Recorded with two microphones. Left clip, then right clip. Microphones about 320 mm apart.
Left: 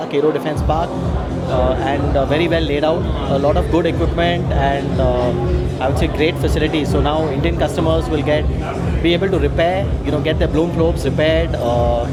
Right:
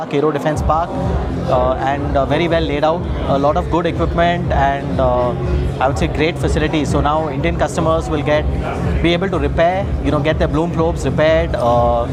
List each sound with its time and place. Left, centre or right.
0.1 s speech: right
5.8 s speech: right
7.0 s speech: right